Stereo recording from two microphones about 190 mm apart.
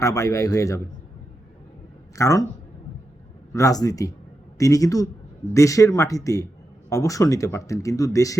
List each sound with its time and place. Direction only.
0.0 s speech: 15° left (ahead or behind)
2.1 s speech: 15° left (ahead or behind)
3.5 s speech: 20° left (ahead or behind)